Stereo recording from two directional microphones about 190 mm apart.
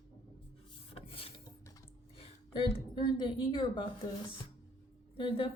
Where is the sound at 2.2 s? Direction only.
25° left (ahead or behind).